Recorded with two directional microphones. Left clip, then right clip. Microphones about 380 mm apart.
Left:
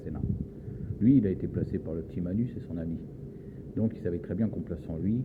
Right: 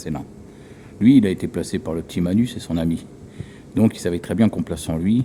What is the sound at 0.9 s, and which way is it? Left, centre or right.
A man's voice, centre.